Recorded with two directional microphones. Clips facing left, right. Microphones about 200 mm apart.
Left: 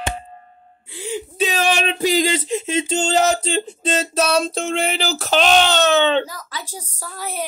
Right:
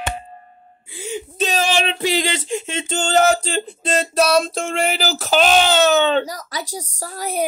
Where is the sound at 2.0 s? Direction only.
35° left (ahead or behind).